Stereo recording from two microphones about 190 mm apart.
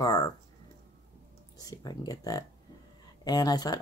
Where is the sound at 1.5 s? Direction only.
20° left (ahead or behind).